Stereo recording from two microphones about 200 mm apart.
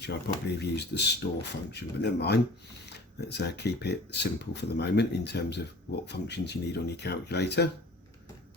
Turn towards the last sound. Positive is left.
turn(degrees=55)  # may be behind; listen again after turning